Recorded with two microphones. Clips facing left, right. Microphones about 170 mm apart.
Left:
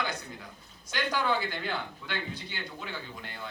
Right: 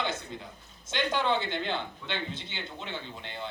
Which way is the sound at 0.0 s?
25° right (ahead or behind).